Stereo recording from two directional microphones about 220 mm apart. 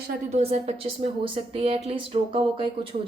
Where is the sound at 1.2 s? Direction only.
25° right (ahead or behind).